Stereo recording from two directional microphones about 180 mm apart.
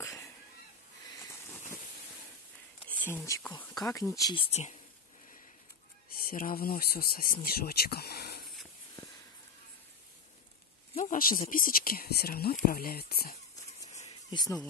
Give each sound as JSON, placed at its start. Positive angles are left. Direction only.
{"t": 0.0, "sound": "a sound", "side_deg": 15}
{"t": 2.9, "sound": "speech", "side_deg": 10}
{"t": 6.1, "sound": "speech", "side_deg": 55}
{"t": 11.0, "sound": "speech", "side_deg": 50}
{"t": 14.3, "sound": "speech", "side_deg": 20}